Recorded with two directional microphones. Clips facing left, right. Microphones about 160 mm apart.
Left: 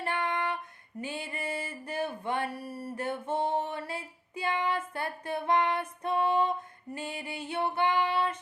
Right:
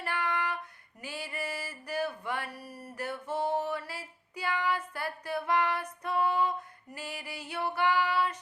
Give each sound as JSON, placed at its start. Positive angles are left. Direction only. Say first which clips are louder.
{"t": 0.0, "sound": "female singing", "louder": "left 2 dB", "side_deg": 25}
{"t": 1.0, "sound": "a sound", "louder": "left 1 dB", "side_deg": 25}
{"t": 6.9, "sound": "female singing", "louder": "left 4 dB", "side_deg": 25}